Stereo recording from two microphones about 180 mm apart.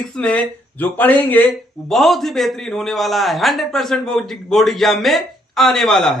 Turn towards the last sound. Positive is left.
turn(degrees=0)  # may be behind; listen again after turning